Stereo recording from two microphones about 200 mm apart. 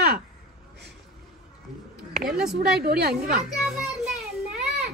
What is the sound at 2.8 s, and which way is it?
Speech, 55° right (ahead or behind).